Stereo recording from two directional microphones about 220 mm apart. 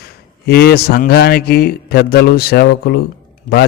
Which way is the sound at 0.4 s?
45° left (ahead or behind).